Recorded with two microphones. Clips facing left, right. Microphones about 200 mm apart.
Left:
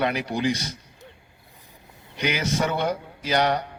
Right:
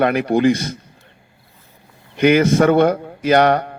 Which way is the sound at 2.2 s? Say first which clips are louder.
Right 12 dB; 55° right (ahead or behind).